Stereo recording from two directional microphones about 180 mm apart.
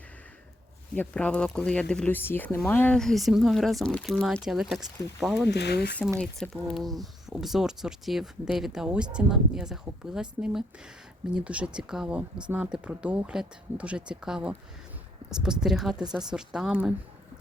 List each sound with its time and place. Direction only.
0.9 s speech: 5° left (ahead or behind)
5.5 s speech: 70° left (ahead or behind)
6.1 s speech: 5° left (ahead or behind)